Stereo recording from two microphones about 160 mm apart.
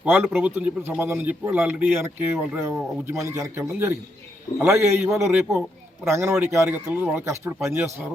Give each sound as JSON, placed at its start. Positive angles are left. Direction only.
{"t": 0.0, "sound": "speech", "side_deg": -10}